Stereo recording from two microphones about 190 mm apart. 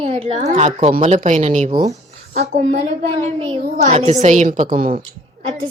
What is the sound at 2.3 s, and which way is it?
Speech, 35° right (ahead or behind).